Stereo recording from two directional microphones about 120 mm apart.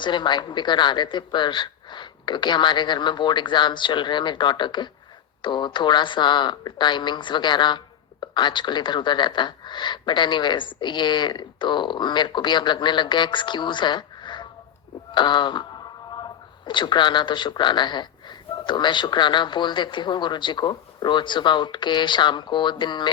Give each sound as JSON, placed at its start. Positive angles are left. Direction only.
{"t": 0.0, "sound": "speech", "side_deg": 40}